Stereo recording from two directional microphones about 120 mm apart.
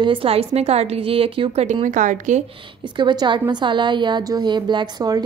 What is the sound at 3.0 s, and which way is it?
A woman's voice, 40° right (ahead or behind).